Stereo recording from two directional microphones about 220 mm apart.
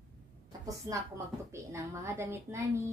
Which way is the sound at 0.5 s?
15° right (ahead or behind).